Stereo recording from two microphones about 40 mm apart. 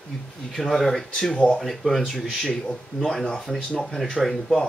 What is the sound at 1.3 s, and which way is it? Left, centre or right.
Speech, left.